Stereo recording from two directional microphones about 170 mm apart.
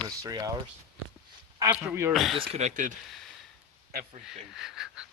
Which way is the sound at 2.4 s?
45° right (ahead or behind).